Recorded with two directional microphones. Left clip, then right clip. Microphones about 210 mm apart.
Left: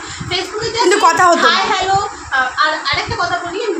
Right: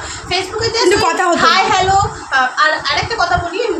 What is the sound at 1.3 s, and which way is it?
Speech, 20° right (ahead or behind).